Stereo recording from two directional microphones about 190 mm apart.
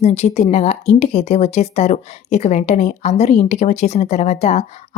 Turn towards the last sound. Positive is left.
turn(degrees=35)  # may be behind; listen again after turning